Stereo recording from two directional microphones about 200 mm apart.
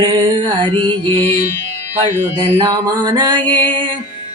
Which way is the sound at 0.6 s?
25° right (ahead or behind).